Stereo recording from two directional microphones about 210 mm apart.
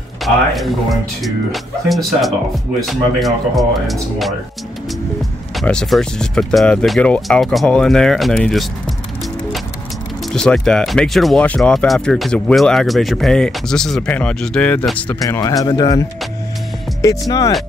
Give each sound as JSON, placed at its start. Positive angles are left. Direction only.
{"t": 0.2, "sound": "speech", "side_deg": 0}
{"t": 5.6, "sound": "speech", "side_deg": 0}
{"t": 10.3, "sound": "speech", "side_deg": 5}